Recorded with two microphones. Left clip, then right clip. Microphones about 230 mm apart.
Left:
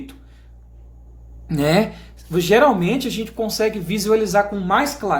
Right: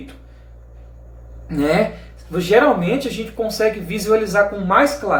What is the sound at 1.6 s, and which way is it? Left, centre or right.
Speech, left.